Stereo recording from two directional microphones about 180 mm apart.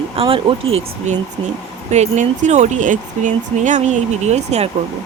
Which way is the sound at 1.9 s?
40° right (ahead or behind).